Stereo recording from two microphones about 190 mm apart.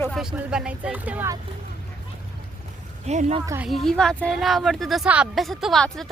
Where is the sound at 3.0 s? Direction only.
35° right (ahead or behind).